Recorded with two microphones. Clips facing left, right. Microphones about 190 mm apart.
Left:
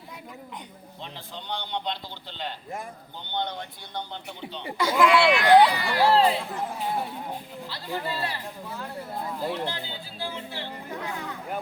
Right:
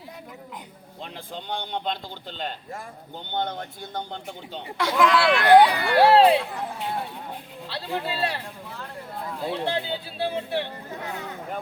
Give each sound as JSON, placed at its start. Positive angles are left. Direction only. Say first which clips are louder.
{"t": 1.3, "sound": "a man's voice", "louder": "right 2 dB", "side_deg": -50}
{"t": 4.8, "sound": "speech", "louder": "even", "side_deg": 0}
{"t": 5.4, "sound": "a man's voice", "louder": "right 5 dB", "side_deg": -60}
{"t": 9.5, "sound": "speech", "louder": "right 4 dB", "side_deg": -65}